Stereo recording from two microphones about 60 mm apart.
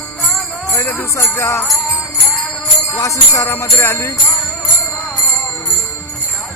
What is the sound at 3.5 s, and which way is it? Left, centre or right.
Jingle bell, left.